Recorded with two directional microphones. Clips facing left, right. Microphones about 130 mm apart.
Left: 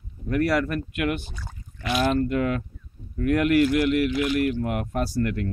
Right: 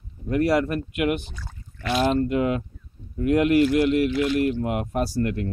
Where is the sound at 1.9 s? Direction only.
25° right (ahead or behind).